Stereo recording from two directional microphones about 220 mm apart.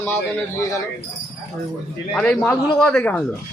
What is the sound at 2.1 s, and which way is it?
Speech, 5° left (ahead or behind).